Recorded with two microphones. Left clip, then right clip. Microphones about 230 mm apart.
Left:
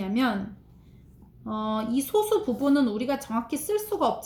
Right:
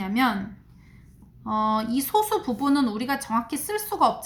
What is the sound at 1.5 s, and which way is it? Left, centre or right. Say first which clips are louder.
A woman's voice: right 6 dB; right.